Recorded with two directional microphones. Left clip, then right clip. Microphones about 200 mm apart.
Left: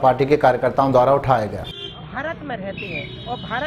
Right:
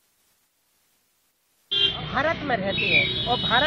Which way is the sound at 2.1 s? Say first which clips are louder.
Right 4 dB; 10° left (ahead or behind).